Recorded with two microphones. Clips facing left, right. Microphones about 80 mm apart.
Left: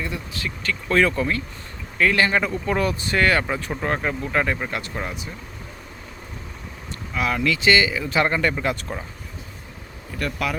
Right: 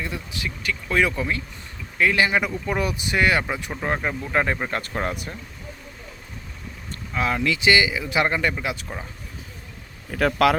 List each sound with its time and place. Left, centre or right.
0.0 s speech: right
4.4 s speech: right
4.7 s speech: right
7.1 s speech: right
8.5 s speech: centre
10.1 s speech: right